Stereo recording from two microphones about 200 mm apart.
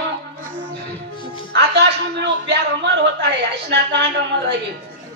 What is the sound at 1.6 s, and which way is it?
A man's voice, 55° right (ahead or behind).